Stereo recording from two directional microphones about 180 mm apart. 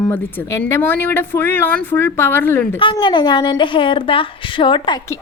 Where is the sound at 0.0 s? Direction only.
10° left (ahead or behind).